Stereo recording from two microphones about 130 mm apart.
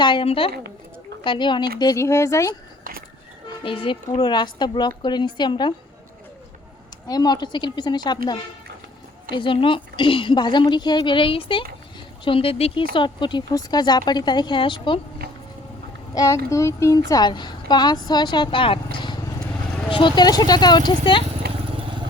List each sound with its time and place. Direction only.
0.0 s a woman's voice: 40° left (ahead or behind)
2.0 s speech: 20° left (ahead or behind)
3.6 s a woman's voice: 40° left (ahead or behind)
7.1 s a woman's voice: 30° left (ahead or behind)
16.1 s a woman's voice: 25° left (ahead or behind)